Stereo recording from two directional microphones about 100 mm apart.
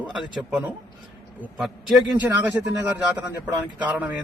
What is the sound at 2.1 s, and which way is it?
Speech, 15° right (ahead or behind).